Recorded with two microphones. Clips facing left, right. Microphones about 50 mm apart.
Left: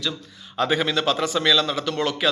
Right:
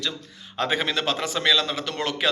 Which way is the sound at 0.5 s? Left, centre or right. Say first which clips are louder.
Left 3 dB; right.